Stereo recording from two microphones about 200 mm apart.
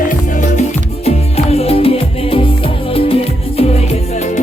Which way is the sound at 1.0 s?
30° left (ahead or behind).